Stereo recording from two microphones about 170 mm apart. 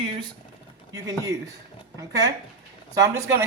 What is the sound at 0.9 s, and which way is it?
Speech, 20° right (ahead or behind).